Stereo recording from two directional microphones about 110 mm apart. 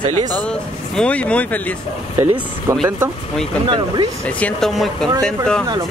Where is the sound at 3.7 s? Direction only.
45° right (ahead or behind).